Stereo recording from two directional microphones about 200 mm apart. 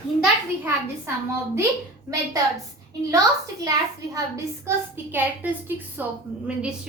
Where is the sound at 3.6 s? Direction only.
15° right (ahead or behind).